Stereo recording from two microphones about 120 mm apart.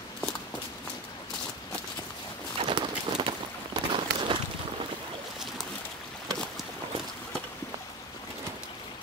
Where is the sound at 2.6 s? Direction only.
45° right (ahead or behind).